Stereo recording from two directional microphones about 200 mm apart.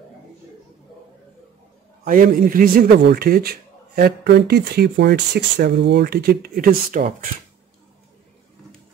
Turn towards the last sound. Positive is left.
turn(degrees=-45)  # may be behind; listen again after turning